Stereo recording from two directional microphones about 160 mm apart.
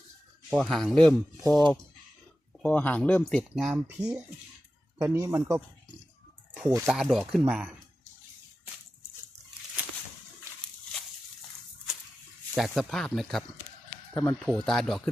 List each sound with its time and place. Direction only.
0.5 s speech: centre (ahead or behind)
4.9 s speech: 20° right (ahead or behind)
6.8 s speech: centre (ahead or behind)
9.8 s a sound: 5° right (ahead or behind)
12.5 s speech: centre (ahead or behind)